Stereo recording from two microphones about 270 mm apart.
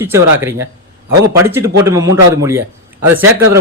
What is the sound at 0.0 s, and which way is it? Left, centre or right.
Speech, centre.